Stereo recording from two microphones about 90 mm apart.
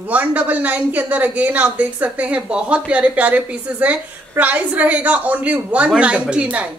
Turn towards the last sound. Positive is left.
turn(degrees=-15)  # may be behind; listen again after turning